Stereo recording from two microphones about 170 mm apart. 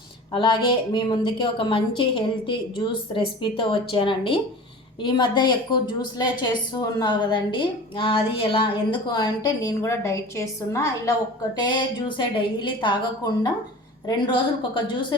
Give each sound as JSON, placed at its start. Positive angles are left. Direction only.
{"t": 0.3, "sound": "a woman's voice", "side_deg": 30}